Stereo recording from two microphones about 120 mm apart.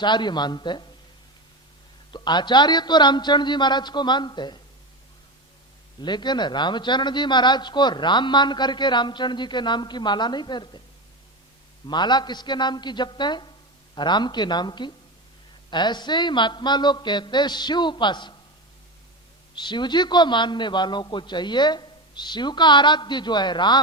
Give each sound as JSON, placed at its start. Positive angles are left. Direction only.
{"t": 0.0, "sound": "speech", "side_deg": 40}
{"t": 2.1, "sound": "speech", "side_deg": 40}
{"t": 6.0, "sound": "speech", "side_deg": 40}
{"t": 11.9, "sound": "speech", "side_deg": 40}
{"t": 19.5, "sound": "speech", "side_deg": 40}